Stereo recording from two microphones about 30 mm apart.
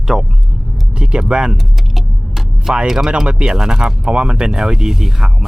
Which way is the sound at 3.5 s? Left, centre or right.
Right.